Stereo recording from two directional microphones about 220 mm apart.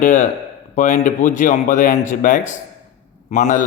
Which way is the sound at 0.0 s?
35° left (ahead or behind).